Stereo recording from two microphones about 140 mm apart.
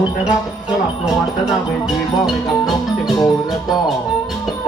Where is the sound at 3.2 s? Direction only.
30° left (ahead or behind).